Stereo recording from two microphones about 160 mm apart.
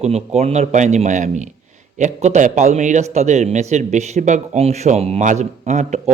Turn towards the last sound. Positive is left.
turn(degrees=-45)  # may be behind; listen again after turning